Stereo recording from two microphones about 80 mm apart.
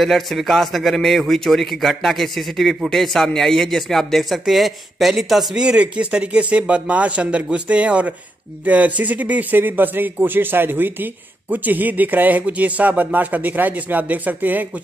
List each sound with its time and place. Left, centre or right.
0.0 s a man's voice: centre; by 14.7 s right